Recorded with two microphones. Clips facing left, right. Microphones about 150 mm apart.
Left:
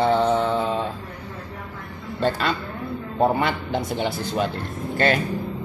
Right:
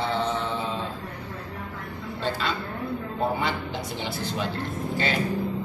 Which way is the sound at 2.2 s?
55° left (ahead or behind).